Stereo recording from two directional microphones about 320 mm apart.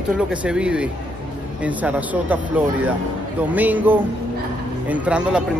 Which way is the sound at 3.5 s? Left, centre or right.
Centre.